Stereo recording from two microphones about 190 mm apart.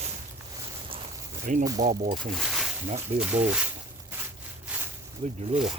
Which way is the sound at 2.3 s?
Centre (ahead or behind).